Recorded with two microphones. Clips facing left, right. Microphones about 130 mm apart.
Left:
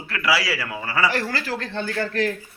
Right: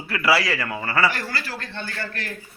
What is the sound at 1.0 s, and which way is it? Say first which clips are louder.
Speech: left 2 dB; 90° left.